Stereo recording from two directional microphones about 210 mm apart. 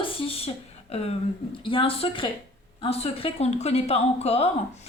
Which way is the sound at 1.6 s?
25° left (ahead or behind).